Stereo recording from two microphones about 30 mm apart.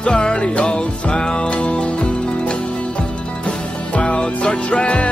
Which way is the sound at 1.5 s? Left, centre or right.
Left.